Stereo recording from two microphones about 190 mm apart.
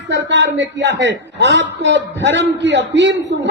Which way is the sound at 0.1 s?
70° right (ahead or behind).